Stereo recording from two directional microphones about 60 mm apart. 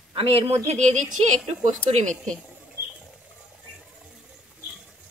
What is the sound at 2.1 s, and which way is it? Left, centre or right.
Speech, centre.